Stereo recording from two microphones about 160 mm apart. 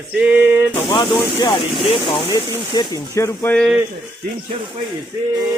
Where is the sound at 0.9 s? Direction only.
30° left (ahead or behind).